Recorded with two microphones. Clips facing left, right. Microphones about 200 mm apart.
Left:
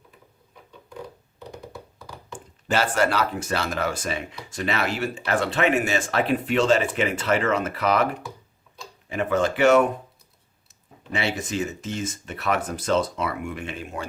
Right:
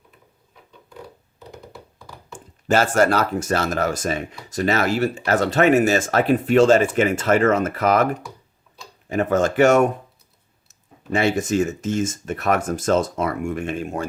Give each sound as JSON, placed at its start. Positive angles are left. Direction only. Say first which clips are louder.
{"t": 1.4, "sound": "a sound", "louder": "left 2 dB", "side_deg": 0}
{"t": 2.6, "sound": "speech", "louder": "right 5 dB", "side_deg": -45}
{"t": 9.0, "sound": "speech", "louder": "right 4 dB", "side_deg": -45}
{"t": 11.1, "sound": "speech", "louder": "right 7 dB", "side_deg": -45}